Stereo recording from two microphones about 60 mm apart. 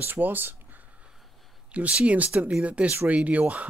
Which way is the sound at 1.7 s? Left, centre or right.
Centre.